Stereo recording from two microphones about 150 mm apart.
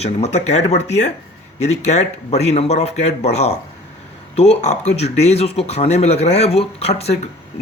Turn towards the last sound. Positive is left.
turn(degrees=45)  # may be behind; listen again after turning